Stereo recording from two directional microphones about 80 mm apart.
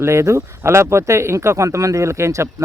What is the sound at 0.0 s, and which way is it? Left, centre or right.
Speech, right.